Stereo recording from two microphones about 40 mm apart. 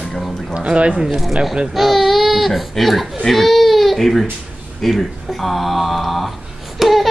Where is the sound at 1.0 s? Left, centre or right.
Centre.